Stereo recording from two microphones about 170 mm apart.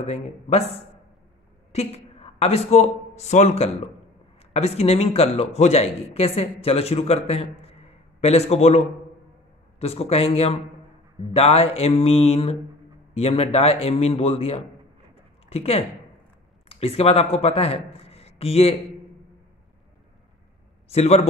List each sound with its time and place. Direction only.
0.0 s speech: 40° left (ahead or behind)
1.7 s a woman's voice: 40° left (ahead or behind)
20.9 s speech: 40° left (ahead or behind)